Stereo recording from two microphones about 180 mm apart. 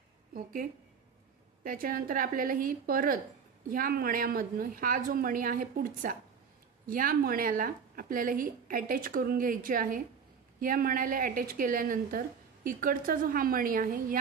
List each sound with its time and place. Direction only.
0.3 s a woman's voice: 50° right (ahead or behind)